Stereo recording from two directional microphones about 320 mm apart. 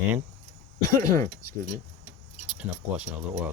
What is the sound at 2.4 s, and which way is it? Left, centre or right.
Keys jangling, centre.